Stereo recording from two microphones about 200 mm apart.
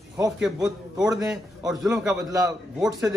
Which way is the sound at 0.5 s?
20° right (ahead or behind).